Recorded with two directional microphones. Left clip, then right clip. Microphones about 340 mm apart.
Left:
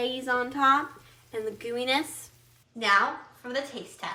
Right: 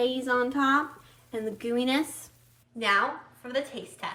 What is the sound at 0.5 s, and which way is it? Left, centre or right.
Speech, centre.